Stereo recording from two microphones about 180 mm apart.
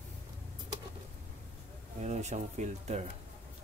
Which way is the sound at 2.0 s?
40° right (ahead or behind).